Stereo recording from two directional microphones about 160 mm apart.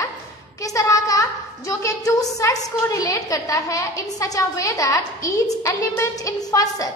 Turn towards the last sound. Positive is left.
turn(degrees=20)  # may be behind; listen again after turning